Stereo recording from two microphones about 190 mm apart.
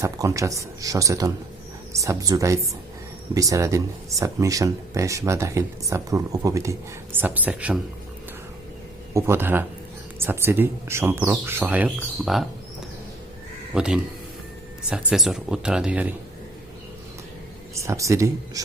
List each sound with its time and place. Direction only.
0.0 s speech: 15° right (ahead or behind)
9.1 s speech: 15° right (ahead or behind)
13.7 s speech: 5° right (ahead or behind)
17.8 s speech: 15° right (ahead or behind)